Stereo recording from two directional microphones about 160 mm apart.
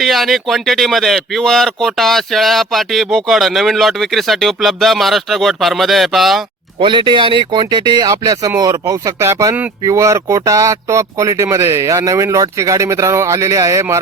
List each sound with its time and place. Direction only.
0.0 s speech: centre (ahead or behind)
6.7 s speech: 30° right (ahead or behind)